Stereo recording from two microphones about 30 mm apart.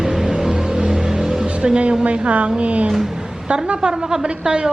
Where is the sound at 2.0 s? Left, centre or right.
Right.